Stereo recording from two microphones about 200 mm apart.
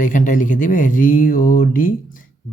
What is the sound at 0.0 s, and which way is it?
Speech, 40° left (ahead or behind).